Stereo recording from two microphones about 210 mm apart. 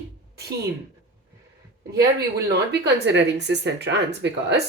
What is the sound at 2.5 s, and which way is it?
A woman's voice, 55° right (ahead or behind).